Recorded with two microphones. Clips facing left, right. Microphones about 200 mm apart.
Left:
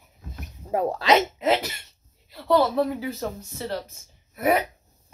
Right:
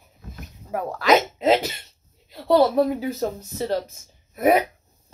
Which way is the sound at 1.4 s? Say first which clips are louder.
Right 4 dB; 25° right (ahead or behind).